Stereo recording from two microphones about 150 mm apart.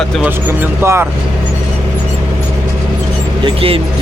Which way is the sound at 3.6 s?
40° right (ahead or behind).